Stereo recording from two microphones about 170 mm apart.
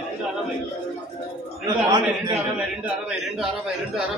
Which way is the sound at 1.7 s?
25° right (ahead or behind).